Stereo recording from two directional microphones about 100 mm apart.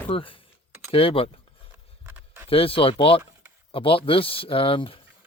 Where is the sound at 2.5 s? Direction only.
70° left (ahead or behind).